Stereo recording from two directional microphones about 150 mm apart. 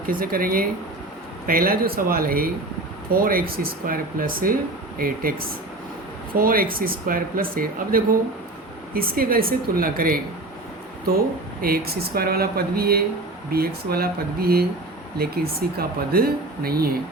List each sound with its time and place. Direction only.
0.1 s speech: 70° right (ahead or behind)
11.6 s speech: 85° right